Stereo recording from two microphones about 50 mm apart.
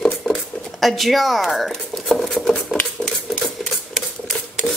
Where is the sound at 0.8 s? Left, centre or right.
Centre.